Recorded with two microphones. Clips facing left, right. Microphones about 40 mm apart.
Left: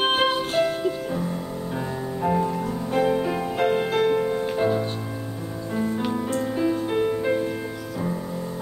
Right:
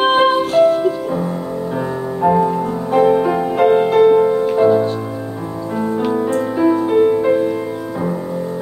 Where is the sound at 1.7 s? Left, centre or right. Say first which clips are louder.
Right 6 dB; centre.